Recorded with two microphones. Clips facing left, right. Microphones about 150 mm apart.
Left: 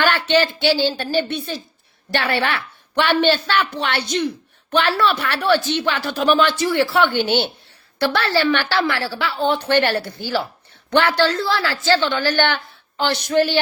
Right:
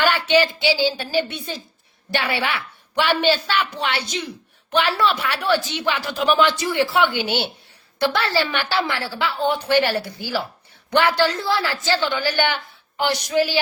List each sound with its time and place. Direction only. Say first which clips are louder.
0.0 s a sound: even; 10° right (ahead or behind)
0.4 s speech: left 2 dB; 60° left (ahead or behind)
0.8 s a woman's voice: left 1 dB; 10° right (ahead or behind)